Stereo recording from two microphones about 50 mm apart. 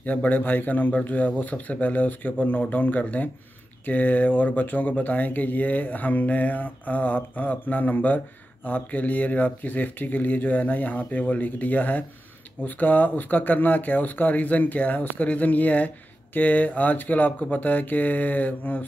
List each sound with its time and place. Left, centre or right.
0.0 s speech: left